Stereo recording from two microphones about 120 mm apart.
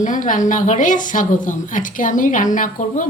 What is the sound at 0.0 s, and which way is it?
Speech, 90° left.